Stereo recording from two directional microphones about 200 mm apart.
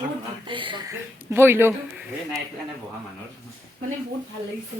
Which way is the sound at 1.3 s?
10° right (ahead or behind).